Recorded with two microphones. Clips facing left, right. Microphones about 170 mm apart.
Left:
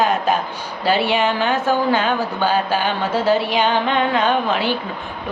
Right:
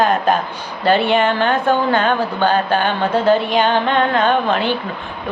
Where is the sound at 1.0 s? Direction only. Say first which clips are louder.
Right 3 dB; 55° right (ahead or behind).